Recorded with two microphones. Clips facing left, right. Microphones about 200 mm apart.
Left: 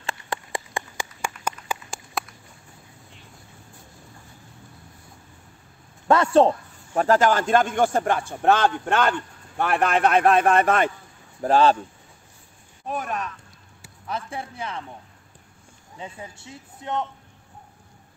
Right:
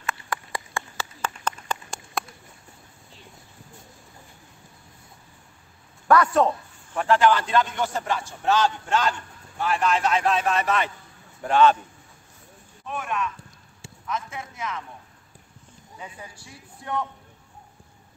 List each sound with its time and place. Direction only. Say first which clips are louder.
0.0 s a sound: even; 25° left (ahead or behind); by 2.2 s 5° left (ahead or behind)
6.0 s a man's voice: left 2 dB; 25° left (ahead or behind)
6.9 s a man's voice: left 1 dB; 40° left (ahead or behind)
11.4 s a man's voice: left 1 dB; 35° left (ahead or behind)
12.8 s a sound: left 1 dB; 40° left (ahead or behind)
14.0 s a man's voice: left 1 dB; 35° left (ahead or behind)
16.0 s a man's voice: left 4 dB; 25° left (ahead or behind)